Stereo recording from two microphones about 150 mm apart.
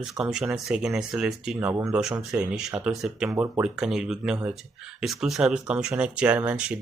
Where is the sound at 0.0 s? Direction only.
5° right (ahead or behind).